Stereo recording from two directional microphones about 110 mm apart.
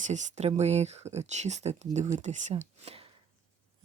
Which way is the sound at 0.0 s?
90° right.